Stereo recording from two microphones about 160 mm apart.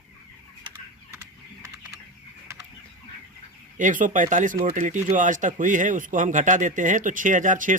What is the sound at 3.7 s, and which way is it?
Speech, 55° right (ahead or behind).